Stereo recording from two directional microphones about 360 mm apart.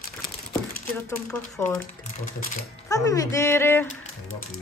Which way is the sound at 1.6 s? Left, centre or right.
Centre.